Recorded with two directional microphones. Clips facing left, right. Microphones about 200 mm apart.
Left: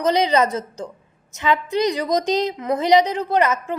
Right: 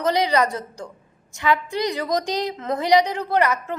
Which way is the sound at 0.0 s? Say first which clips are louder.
Left 2 dB; 20° left (ahead or behind).